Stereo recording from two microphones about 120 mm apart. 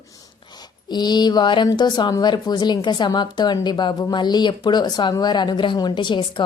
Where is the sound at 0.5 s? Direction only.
35° left (ahead or behind).